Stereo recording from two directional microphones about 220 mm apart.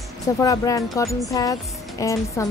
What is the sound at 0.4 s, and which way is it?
Speech, 15° left (ahead or behind).